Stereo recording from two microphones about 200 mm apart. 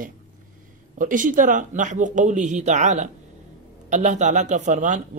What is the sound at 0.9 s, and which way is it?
Speech, 40° right (ahead or behind).